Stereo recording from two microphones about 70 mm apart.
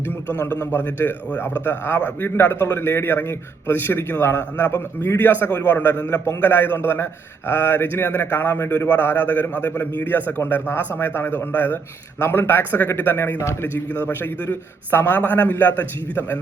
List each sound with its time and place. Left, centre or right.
0.6 s a man's voice: left
13.7 s a man's voice: left